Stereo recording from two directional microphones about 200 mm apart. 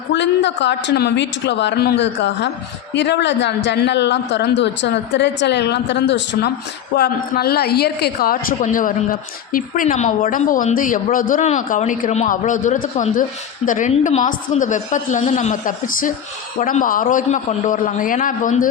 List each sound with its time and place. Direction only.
0.1 s a woman's voice: 60° left (ahead or behind); by 18.7 s 40° left (ahead or behind)